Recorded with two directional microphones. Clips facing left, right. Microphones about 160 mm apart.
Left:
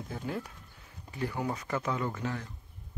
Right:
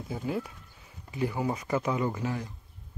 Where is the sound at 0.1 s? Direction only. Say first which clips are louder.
Right 5 dB; 5° right (ahead or behind).